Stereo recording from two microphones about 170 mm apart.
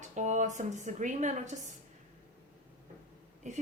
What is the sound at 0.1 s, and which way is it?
A woman's voice, 45° right (ahead or behind).